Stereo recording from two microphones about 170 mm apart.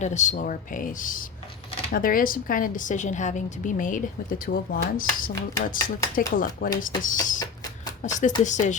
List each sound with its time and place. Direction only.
0.0 s speech: 45° left (ahead or behind)